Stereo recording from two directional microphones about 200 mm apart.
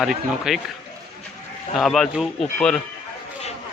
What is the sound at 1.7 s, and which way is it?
A man's voice, centre (ahead or behind).